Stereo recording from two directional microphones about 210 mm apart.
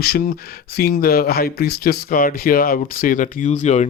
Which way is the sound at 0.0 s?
45° left (ahead or behind).